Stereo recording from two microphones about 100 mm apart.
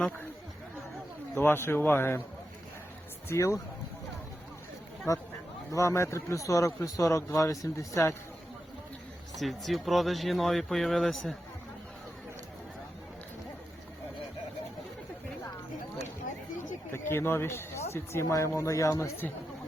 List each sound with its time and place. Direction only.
1.4 s speech: 25° left (ahead or behind)
3.2 s speech: 30° left (ahead or behind)
5.1 s speech: 30° left (ahead or behind)
9.3 s speech: centre (ahead or behind)
16.9 s speech: 25° left (ahead or behind)